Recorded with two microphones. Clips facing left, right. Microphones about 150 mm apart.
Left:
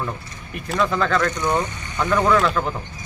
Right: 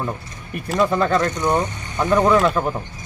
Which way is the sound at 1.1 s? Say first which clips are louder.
Right 2 dB; 30° right (ahead or behind).